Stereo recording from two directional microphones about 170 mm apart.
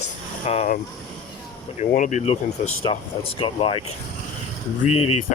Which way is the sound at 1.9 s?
45° left (ahead or behind).